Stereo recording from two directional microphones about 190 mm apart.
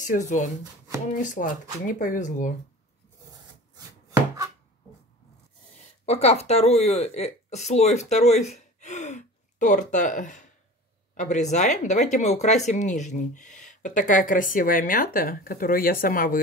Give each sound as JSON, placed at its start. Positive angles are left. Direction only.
{"t": 0.0, "sound": "speech", "side_deg": 40}
{"t": 6.0, "sound": "speech", "side_deg": 35}